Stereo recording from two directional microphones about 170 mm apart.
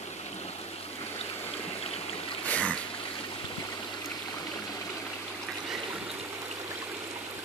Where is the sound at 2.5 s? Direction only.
10° left (ahead or behind).